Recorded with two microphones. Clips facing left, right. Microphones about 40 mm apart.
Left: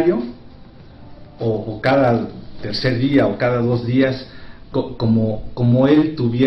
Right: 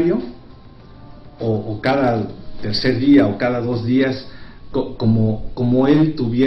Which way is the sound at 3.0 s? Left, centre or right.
Centre.